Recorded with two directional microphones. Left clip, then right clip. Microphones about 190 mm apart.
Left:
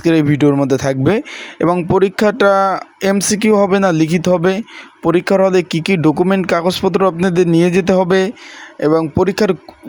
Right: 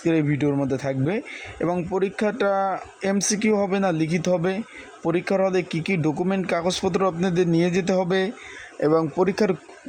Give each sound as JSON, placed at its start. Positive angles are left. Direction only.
{"t": 0.0, "sound": "speech", "side_deg": 20}